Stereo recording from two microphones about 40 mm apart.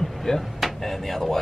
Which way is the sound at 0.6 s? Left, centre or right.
Centre.